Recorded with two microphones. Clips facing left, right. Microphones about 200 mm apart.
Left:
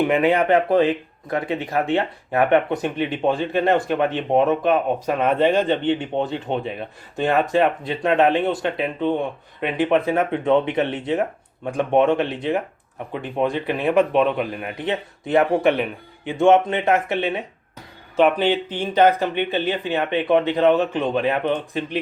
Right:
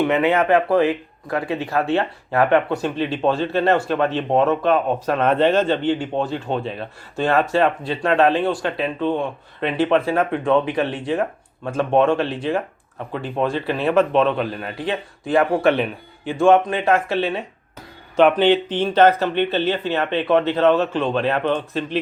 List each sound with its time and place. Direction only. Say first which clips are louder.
0.1 s speech: even; 15° left (ahead or behind)
18.2 s speech: right 3 dB; 5° left (ahead or behind)